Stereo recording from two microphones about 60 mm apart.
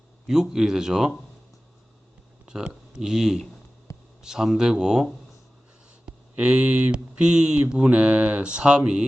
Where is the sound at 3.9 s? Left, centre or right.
Left.